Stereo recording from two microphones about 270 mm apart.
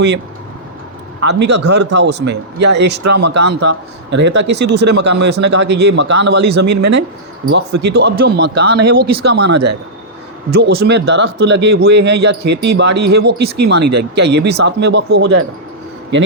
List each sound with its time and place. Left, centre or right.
1.2 s a man's voice: right
10.5 s a man's voice: right
13.8 s speech: right
14.3 s a man's voice: right